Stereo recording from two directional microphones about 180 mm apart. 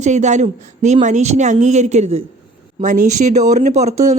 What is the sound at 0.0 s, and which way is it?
Speech, 40° right (ahead or behind).